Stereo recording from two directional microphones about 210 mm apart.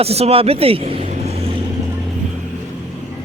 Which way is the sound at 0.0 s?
30° right (ahead or behind).